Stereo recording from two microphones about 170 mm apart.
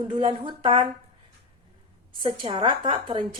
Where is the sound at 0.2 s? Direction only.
30° right (ahead or behind).